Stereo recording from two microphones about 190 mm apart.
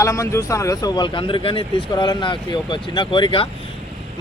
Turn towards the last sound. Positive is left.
turn(degrees=25)  # may be behind; listen again after turning